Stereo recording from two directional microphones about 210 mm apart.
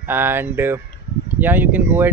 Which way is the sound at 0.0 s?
10° right (ahead or behind).